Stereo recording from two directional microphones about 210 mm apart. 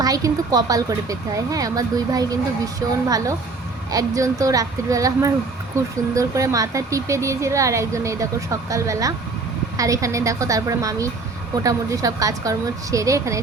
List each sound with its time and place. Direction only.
0.0 s a woman's voice: 15° right (ahead or behind)